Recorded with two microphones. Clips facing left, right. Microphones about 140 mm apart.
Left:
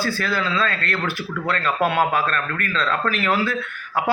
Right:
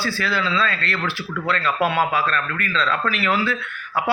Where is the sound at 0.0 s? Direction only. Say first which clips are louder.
Even; 45° left (ahead or behind).